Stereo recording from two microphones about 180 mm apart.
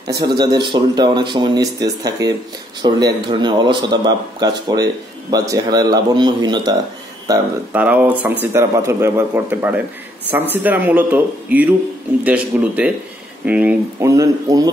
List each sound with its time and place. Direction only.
0.0 s speech: 20° right (ahead or behind)
7.7 s speech: 10° right (ahead or behind)